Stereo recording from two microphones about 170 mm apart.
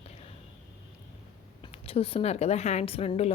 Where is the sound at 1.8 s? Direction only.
35° left (ahead or behind).